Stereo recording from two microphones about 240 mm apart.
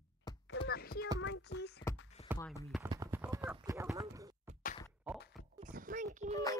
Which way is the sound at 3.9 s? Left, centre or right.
Centre.